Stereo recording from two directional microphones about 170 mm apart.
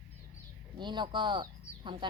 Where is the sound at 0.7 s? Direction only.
25° right (ahead or behind).